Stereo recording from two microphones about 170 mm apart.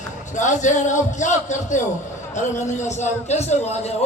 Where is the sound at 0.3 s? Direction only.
45° left (ahead or behind).